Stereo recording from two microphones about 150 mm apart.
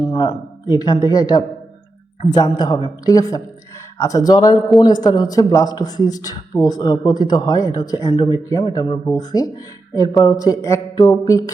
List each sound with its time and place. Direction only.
0.0 s speech: 30° left (ahead or behind)